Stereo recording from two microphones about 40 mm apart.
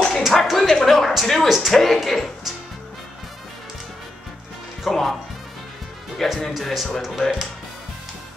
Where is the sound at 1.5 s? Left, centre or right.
Centre.